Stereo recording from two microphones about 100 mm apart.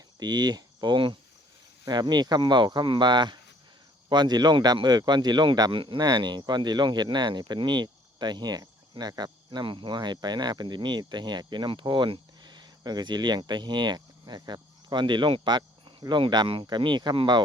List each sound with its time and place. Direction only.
0.2 s speech: 45° right (ahead or behind)